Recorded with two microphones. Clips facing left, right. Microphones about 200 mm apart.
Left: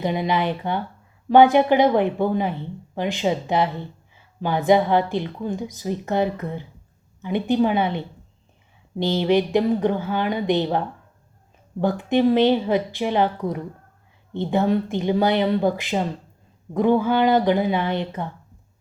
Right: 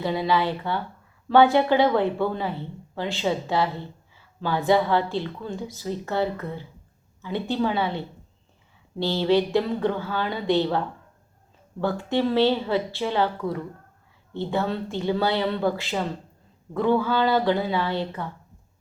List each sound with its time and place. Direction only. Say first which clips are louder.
0.0 s a woman's voice: left 1 dB; 20° left (ahead or behind)